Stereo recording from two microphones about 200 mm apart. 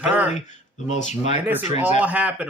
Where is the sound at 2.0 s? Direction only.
5° right (ahead or behind).